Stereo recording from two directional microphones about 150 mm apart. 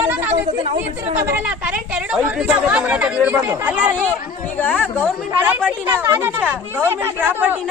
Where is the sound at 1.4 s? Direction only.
5° right (ahead or behind).